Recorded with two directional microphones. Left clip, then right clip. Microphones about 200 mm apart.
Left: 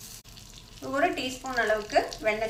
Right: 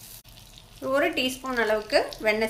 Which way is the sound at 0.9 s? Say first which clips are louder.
Right 2 dB; 50° right (ahead or behind).